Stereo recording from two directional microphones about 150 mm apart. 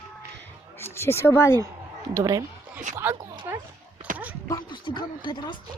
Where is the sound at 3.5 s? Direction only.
10° right (ahead or behind).